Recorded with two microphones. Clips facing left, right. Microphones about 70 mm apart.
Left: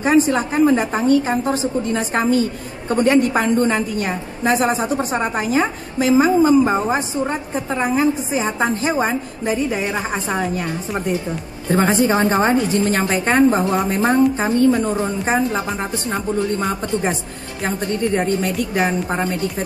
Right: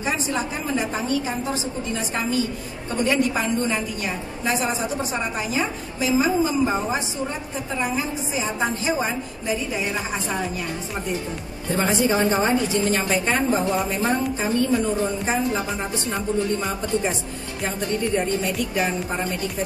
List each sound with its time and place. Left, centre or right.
0.0 s a woman's voice: left
11.7 s a woman's voice: left
16.1 s a woman's voice: left